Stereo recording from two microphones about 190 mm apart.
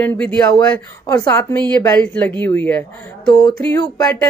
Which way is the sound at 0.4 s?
5° left (ahead or behind).